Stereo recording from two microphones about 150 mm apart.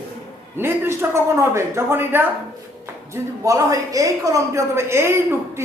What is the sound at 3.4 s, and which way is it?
A woman's voice, 20° right (ahead or behind).